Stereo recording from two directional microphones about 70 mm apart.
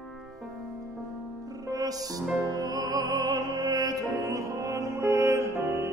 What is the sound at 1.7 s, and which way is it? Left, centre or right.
Music, right.